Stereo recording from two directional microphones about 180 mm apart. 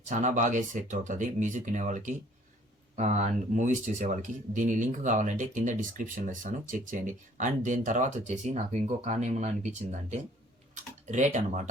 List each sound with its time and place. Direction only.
0.1 s speech: 45° right (ahead or behind)